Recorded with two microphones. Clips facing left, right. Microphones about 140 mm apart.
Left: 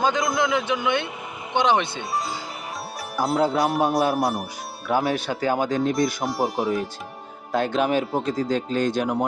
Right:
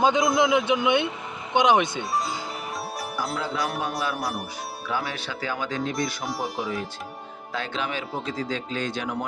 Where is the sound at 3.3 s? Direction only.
50° left (ahead or behind).